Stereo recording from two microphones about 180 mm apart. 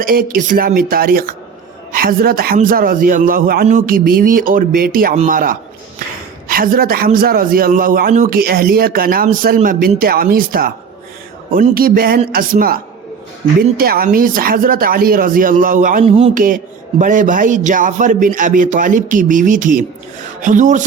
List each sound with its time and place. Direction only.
0.0 s a man's voice: 50° right (ahead or behind)
16.0 s speech: 30° right (ahead or behind)
16.3 s a man's voice: 45° right (ahead or behind)